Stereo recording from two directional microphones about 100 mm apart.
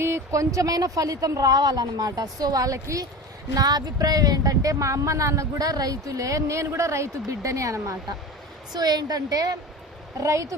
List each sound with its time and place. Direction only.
0.0 s speech: 30° right (ahead or behind)
8.7 s speech: 45° right (ahead or behind)